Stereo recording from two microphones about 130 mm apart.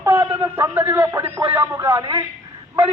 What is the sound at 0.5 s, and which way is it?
A man's voice, 15° right (ahead or behind).